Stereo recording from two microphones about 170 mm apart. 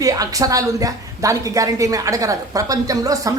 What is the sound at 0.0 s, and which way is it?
A woman's voice, 20° right (ahead or behind).